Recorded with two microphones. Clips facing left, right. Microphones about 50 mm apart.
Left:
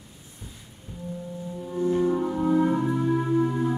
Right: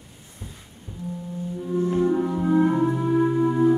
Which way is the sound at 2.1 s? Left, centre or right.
Centre.